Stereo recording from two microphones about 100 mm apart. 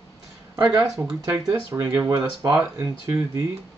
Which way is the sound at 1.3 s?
35° right (ahead or behind).